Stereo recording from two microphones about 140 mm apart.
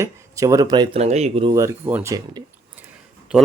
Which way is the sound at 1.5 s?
20° right (ahead or behind).